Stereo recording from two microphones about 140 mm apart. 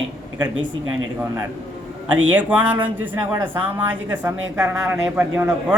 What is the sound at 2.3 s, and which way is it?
A woman's voice, 10° right (ahead or behind).